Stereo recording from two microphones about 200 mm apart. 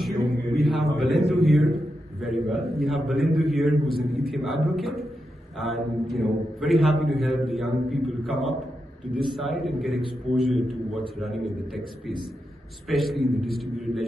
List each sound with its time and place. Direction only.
0.5 s a sound: centre (ahead or behind)
2.8 s a man's voice: centre (ahead or behind)
12.8 s a man's voice: centre (ahead or behind)